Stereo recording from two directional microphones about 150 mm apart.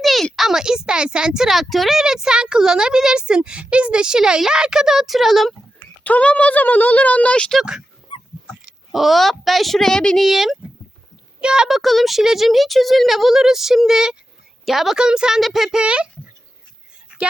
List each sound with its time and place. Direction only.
0.0 s speech: centre (ahead or behind)
8.1 s dog: 35° left (ahead or behind)
8.9 s speech: centre (ahead or behind)